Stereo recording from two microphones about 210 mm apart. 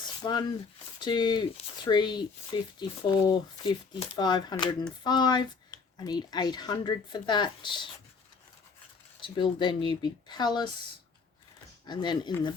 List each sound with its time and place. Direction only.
0.2 s speech: 20° left (ahead or behind)
9.2 s speech: 25° left (ahead or behind)
11.9 s speech: 20° left (ahead or behind)